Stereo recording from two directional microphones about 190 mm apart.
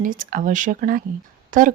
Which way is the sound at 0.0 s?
45° right (ahead or behind).